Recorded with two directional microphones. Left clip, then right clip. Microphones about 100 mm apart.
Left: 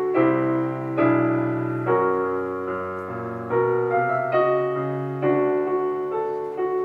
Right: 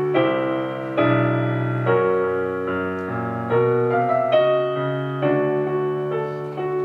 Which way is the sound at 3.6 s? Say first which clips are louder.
Right 1 dB; 20° right (ahead or behind).